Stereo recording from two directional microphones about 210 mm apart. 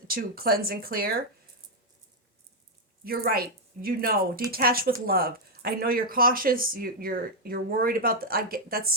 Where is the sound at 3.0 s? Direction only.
45° right (ahead or behind).